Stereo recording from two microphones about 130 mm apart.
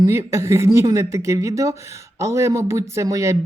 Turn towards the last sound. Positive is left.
turn(degrees=-25)  # may be behind; listen again after turning